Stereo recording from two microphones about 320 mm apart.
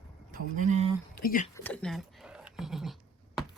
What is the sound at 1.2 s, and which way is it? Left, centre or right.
Speech, left.